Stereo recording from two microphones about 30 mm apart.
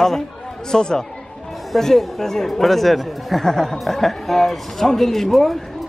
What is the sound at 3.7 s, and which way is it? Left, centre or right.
Speech, centre.